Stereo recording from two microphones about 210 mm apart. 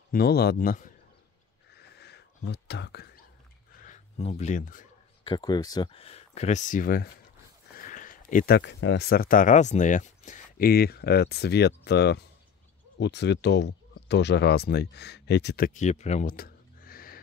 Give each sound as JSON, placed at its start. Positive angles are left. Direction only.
{"t": 0.1, "sound": "speech", "side_deg": 50}
{"t": 1.7, "sound": "a sound", "side_deg": 50}
{"t": 3.8, "sound": "speech", "side_deg": 35}
{"t": 5.2, "sound": "speech", "side_deg": 20}
{"t": 7.7, "sound": "a sound", "side_deg": 40}
{"t": 8.5, "sound": "speech", "side_deg": 55}